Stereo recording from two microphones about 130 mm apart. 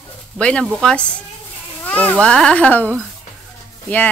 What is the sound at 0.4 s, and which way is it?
Speech, 10° left (ahead or behind).